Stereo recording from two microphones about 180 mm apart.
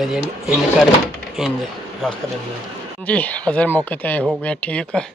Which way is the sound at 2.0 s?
5° left (ahead or behind).